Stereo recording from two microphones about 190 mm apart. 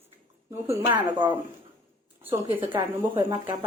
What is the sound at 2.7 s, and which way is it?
Speech, 25° right (ahead or behind).